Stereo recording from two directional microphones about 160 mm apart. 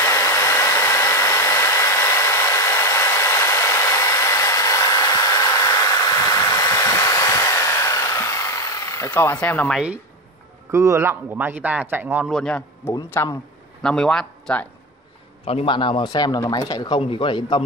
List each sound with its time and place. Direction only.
0.0 s hair dryer: 15° left (ahead or behind)
8.8 s speech: 20° left (ahead or behind)
10.7 s speech: 20° right (ahead or behind)
12.3 s speech: 5° left (ahead or behind)
13.8 s speech: 5° left (ahead or behind)
15.4 s speech: 35° left (ahead or behind)